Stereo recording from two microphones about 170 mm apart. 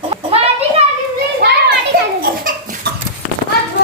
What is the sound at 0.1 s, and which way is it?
Children playing, 35° right (ahead or behind).